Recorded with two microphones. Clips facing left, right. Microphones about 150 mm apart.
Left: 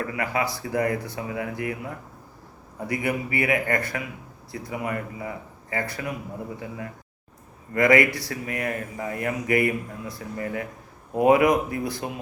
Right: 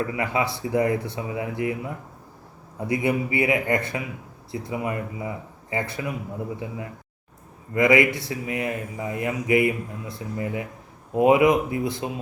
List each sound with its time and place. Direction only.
0.1 s speech: 25° right (ahead or behind)
2.8 s speech: 25° right (ahead or behind)
7.7 s speech: 20° right (ahead or behind)